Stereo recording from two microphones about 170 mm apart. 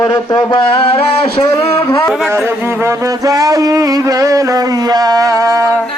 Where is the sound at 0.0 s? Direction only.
20° left (ahead or behind).